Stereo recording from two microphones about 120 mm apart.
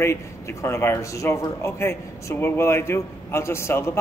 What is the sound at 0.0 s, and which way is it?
A man's voice, 20° left (ahead or behind).